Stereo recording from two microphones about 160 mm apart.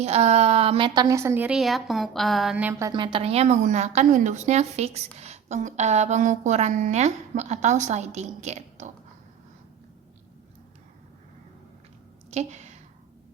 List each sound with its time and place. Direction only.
0.0 s a woman's voice: 45° right (ahead or behind); by 2.9 s 15° right (ahead or behind)
2.9 s a woman's voice: 30° right (ahead or behind)
12.3 s a sound: 45° right (ahead or behind)